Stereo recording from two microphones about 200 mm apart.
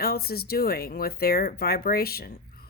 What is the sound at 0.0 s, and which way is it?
Speech, 50° left (ahead or behind).